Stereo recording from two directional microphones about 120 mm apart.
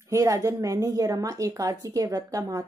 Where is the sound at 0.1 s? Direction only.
25° right (ahead or behind).